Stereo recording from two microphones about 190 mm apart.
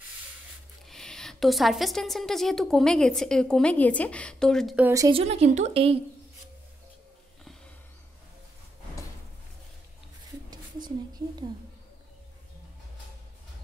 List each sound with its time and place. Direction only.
0.8 s a woman's voice: 5° left (ahead or behind)
4.8 s speech: 15° right (ahead or behind)
5.1 s a woman's voice: 35° right (ahead or behind)
10.5 s a sound: 20° right (ahead or behind)